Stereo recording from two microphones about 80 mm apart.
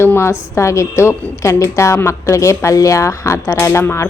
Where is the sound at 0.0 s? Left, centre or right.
Left.